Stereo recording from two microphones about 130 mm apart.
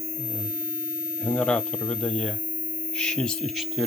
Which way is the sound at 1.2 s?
5° left (ahead or behind).